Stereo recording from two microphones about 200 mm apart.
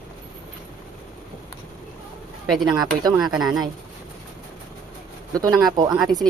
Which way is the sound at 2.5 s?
Centre (ahead or behind).